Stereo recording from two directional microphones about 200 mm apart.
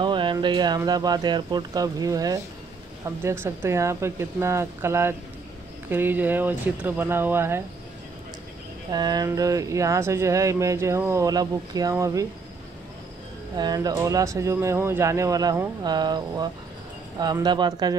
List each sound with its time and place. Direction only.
0.0 s speech: 25° right (ahead or behind)
8.9 s speech: 20° right (ahead or behind)
13.6 s speech: 20° right (ahead or behind)